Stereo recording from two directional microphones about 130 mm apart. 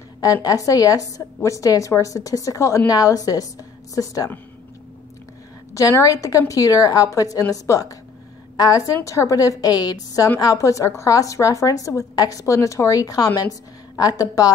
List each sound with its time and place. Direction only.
0.2 s a woman's voice: 30° left (ahead or behind)
5.8 s a woman's voice: 25° left (ahead or behind)